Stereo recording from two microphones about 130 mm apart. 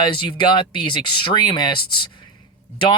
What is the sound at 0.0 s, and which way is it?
Speech, 35° left (ahead or behind).